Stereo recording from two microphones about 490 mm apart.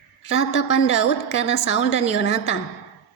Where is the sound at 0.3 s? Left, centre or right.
Left.